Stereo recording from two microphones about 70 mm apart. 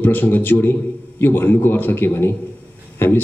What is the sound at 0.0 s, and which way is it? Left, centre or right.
A man's voice, left.